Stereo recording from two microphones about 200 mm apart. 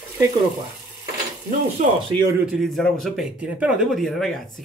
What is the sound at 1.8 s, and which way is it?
Speech, 35° right (ahead or behind).